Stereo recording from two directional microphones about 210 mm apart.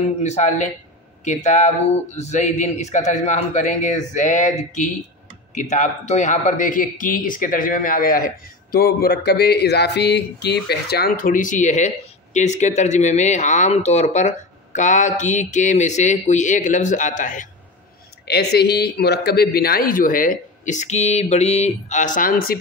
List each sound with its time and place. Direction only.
0.2 s speech: 35° left (ahead or behind)
18.2 s speech: 50° left (ahead or behind)